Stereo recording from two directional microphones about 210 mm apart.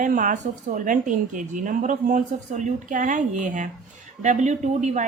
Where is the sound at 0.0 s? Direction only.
40° right (ahead or behind).